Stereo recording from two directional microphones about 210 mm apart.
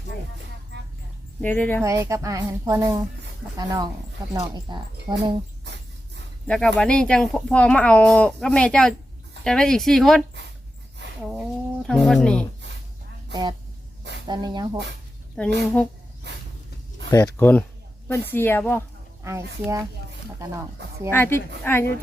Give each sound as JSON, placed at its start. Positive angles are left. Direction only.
{"t": 1.4, "sound": "a woman's voice", "side_deg": 10}
{"t": 1.8, "sound": "a woman's voice", "side_deg": -15}
{"t": 6.5, "sound": "speech", "side_deg": 5}
{"t": 13.3, "sound": "speech", "side_deg": -20}
{"t": 17.1, "sound": "a woman's voice", "side_deg": 15}
{"t": 19.2, "sound": "a woman's voice", "side_deg": -15}
{"t": 21.1, "sound": "a woman's voice", "side_deg": 10}